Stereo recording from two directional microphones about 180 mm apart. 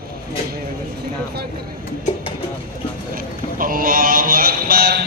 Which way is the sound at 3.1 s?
50° right (ahead or behind).